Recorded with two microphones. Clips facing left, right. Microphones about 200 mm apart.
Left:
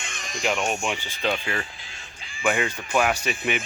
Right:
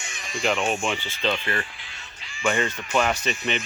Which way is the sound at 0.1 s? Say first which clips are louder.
Right 1 dB; 45° left (ahead or behind).